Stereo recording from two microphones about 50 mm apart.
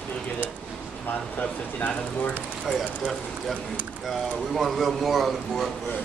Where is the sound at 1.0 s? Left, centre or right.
Left.